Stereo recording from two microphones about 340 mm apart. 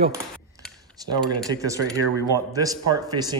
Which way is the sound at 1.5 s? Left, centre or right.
Centre.